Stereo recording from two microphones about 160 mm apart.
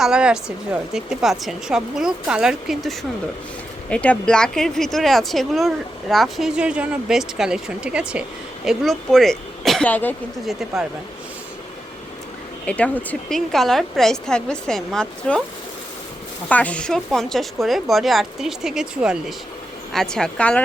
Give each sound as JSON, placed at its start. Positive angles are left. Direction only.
{"t": 0.0, "sound": "speech", "side_deg": -5}
{"t": 10.4, "sound": "speech", "side_deg": 0}
{"t": 12.6, "sound": "speech", "side_deg": 10}
{"t": 16.5, "sound": "speech", "side_deg": 10}